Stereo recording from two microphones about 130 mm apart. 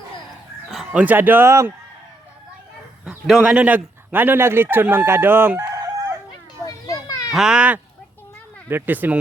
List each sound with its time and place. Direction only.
0.7 s chicken: centre (ahead or behind)
1.0 s a man's voice: 15° right (ahead or behind)
3.0 s a man's voice: 5° right (ahead or behind)
5.5 s chicken: 25° right (ahead or behind)
6.7 s children playing: 25° left (ahead or behind)
7.3 s a man's voice: 5° right (ahead or behind)